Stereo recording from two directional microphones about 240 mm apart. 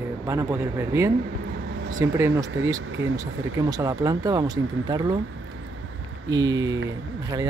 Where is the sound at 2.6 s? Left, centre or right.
Right.